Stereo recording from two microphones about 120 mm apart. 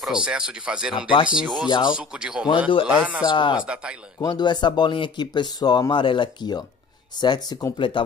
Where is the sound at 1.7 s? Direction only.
40° left (ahead or behind).